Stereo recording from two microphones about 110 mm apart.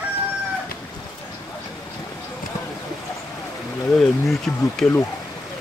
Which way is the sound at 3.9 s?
5° left (ahead or behind).